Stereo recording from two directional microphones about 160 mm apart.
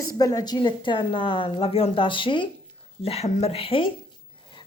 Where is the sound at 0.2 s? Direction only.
25° left (ahead or behind).